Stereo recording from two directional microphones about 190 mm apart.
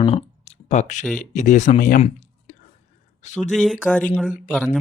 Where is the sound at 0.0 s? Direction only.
35° left (ahead or behind).